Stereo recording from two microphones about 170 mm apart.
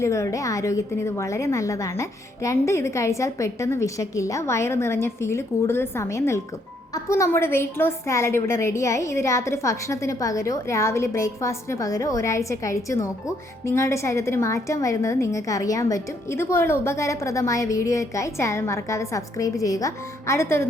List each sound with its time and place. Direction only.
0.0 s a woman's voice: 15° left (ahead or behind)